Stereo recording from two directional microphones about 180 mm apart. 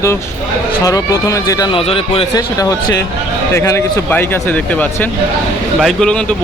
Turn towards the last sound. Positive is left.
turn(degrees=5)  # may be behind; listen again after turning